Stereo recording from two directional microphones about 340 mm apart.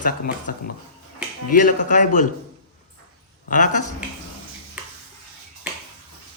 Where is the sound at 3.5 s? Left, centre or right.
Left.